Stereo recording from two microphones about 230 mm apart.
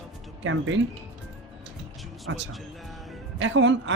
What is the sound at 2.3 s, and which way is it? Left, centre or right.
Speech, right.